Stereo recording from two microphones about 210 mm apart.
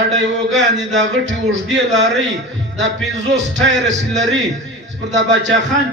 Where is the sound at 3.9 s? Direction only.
35° right (ahead or behind).